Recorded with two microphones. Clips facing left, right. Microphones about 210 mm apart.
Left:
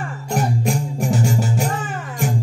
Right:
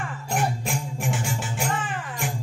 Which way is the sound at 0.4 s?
40° left (ahead or behind).